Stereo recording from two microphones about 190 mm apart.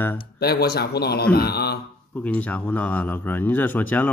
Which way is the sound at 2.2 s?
10° left (ahead or behind).